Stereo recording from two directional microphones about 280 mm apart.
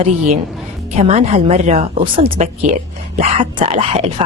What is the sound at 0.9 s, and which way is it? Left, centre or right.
Speech, right.